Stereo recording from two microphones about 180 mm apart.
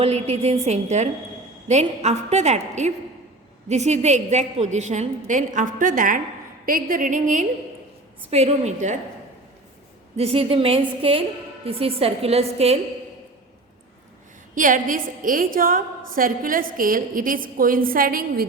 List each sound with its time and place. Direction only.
0.0 s a woman's voice: 35° right (ahead or behind)
8.3 s a woman's voice: 35° right (ahead or behind)
10.2 s a woman's voice: 35° right (ahead or behind)
14.5 s a woman's voice: 45° right (ahead or behind)